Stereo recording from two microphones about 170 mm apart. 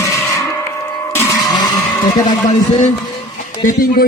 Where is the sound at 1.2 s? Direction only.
25° left (ahead or behind).